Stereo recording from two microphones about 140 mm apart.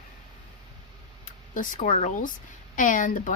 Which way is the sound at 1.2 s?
70° left (ahead or behind).